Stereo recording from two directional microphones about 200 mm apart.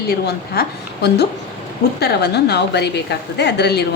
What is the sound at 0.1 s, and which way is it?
A woman's voice, 50° left (ahead or behind).